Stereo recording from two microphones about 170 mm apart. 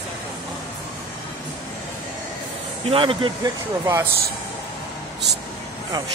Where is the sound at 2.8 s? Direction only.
30° right (ahead or behind).